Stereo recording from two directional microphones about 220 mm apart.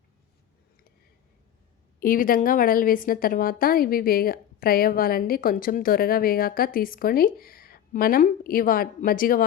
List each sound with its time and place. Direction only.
2.0 s a woman's voice: 40° left (ahead or behind)